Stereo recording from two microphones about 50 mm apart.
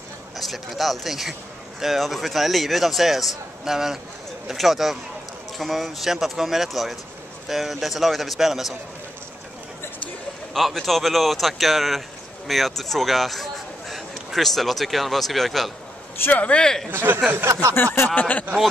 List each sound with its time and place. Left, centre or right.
0.4 s a man's voice: centre
10.5 s a man's voice: centre
16.3 s speech: left
16.5 s speech: centre
16.9 s speech: right
17.5 s speech: right
17.7 s a sound: left